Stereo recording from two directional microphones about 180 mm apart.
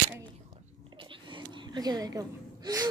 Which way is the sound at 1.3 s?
25° right (ahead or behind).